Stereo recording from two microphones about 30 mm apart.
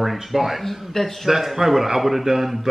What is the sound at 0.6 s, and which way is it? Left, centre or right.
Speech, centre.